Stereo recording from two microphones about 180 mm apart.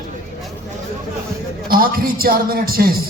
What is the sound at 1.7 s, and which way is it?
A man's voice, 55° right (ahead or behind).